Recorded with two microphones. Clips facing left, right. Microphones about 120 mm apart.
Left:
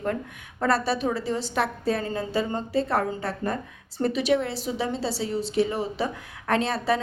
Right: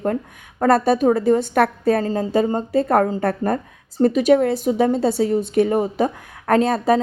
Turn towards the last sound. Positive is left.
turn(degrees=-45)  # may be behind; listen again after turning